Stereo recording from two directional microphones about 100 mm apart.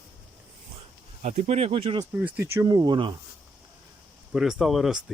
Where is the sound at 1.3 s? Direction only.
90° right; by 2.0 s 65° right (ahead or behind).